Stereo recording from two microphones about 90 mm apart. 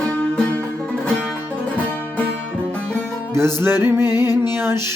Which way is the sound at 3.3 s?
25° right (ahead or behind).